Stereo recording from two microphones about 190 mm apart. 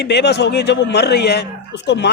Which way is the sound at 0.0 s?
65° left (ahead or behind).